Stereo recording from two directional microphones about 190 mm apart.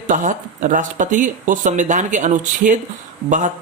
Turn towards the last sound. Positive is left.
turn(degrees=-40)  # may be behind; listen again after turning